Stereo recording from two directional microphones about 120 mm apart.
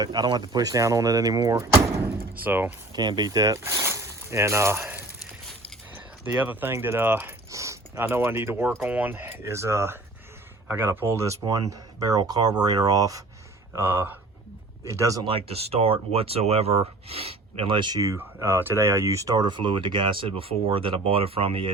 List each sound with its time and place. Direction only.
0.0 s speech: 35° right (ahead or behind)
2.4 s speech: 15° right (ahead or behind)
2.9 s speech: 35° right (ahead or behind)
13.7 s speech: 15° right (ahead or behind)
15.2 s speech: 55° right (ahead or behind)